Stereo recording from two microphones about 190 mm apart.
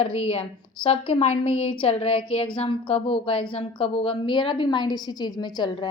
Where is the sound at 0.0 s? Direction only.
30° left (ahead or behind).